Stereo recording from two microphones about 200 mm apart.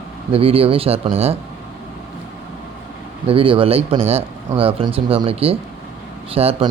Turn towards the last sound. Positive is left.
turn(degrees=-30)  # may be behind; listen again after turning